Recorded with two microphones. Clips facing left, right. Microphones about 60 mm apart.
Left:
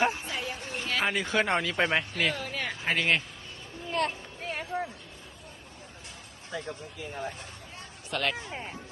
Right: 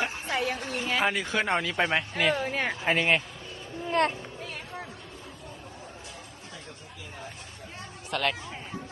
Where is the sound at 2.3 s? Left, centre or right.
Right.